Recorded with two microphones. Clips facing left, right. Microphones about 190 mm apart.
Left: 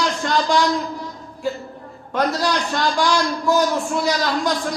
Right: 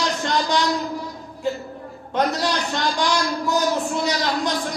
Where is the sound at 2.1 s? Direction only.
20° right (ahead or behind).